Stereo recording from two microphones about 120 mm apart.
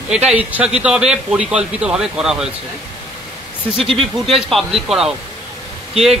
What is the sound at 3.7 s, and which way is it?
Speech, centre (ahead or behind).